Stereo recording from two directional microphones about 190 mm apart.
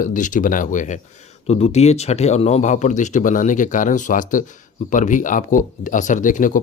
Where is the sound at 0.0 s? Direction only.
45° left (ahead or behind).